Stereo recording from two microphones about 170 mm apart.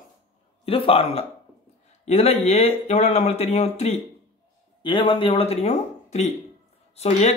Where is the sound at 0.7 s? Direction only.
35° left (ahead or behind).